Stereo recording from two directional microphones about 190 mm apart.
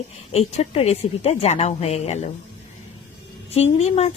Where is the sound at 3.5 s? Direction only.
35° left (ahead or behind).